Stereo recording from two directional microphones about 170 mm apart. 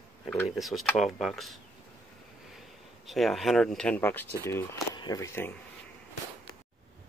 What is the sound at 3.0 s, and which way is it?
Speech, centre (ahead or behind).